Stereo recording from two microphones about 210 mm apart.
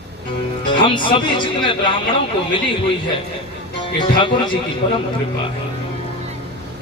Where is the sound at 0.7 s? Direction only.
25° left (ahead or behind).